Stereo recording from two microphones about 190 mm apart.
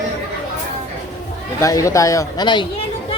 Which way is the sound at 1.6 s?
15° left (ahead or behind).